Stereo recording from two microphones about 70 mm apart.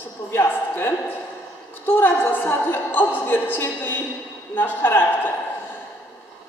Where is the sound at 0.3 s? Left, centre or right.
Left.